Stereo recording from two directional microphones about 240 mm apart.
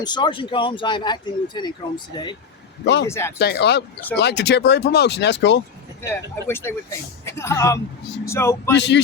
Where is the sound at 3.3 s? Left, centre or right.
Left.